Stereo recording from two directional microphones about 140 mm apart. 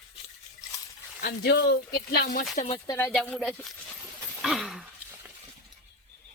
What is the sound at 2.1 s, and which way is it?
Speech, 80° left.